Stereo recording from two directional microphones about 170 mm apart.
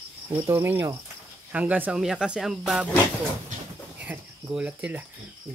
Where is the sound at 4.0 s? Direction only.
10° right (ahead or behind).